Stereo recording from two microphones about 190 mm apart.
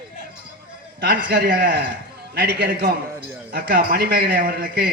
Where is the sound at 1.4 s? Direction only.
50° right (ahead or behind).